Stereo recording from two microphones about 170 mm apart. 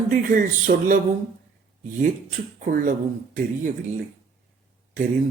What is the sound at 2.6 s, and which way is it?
Mantra, 55° right (ahead or behind).